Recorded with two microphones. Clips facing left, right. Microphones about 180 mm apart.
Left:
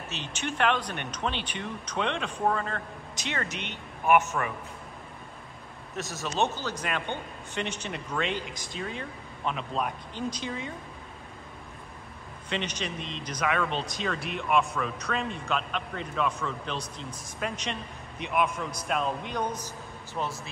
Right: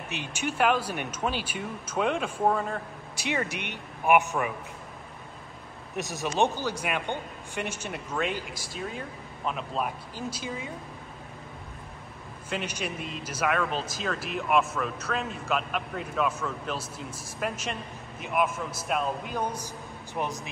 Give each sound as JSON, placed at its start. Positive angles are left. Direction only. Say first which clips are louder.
{"t": 0.1, "sound": "a man's voice", "louder": "right 3 dB", "side_deg": -10}
{"t": 5.9, "sound": "a man's voice", "louder": "right 3 dB", "side_deg": -15}
{"t": 12.4, "sound": "a man's voice", "louder": "even", "side_deg": -5}